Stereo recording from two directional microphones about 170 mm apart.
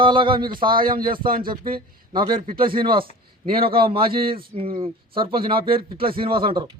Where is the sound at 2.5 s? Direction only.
55° right (ahead or behind).